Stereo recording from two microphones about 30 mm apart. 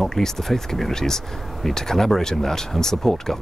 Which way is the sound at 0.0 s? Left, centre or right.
Centre.